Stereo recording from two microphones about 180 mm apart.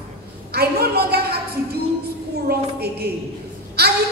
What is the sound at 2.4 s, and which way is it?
Speech, 60° right (ahead or behind).